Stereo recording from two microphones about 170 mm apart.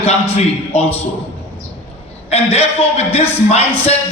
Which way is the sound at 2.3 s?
35° left (ahead or behind).